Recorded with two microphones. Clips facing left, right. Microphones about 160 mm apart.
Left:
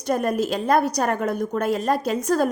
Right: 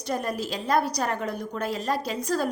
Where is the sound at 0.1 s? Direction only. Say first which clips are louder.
Left 7 dB; 55° left (ahead or behind).